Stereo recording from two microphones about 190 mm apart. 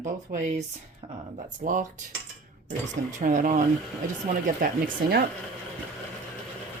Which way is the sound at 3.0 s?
40° right (ahead or behind).